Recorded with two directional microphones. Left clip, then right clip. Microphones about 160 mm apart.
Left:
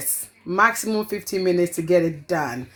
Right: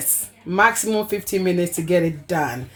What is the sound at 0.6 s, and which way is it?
Speech, 45° left (ahead or behind).